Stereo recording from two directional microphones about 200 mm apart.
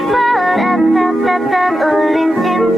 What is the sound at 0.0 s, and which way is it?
Music, centre (ahead or behind).